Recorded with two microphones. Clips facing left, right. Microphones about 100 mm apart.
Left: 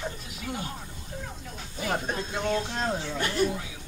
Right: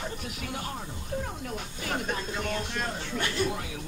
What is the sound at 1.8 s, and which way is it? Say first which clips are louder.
Speech: left 2 dB; 30° left (ahead or behind).